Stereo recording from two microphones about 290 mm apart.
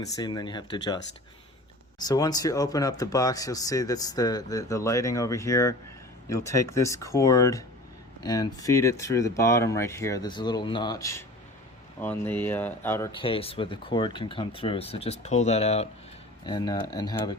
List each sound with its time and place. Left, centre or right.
0.0 s speech: centre
2.0 s speech: centre